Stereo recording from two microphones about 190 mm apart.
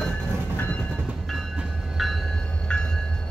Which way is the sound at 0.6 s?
10° left (ahead or behind).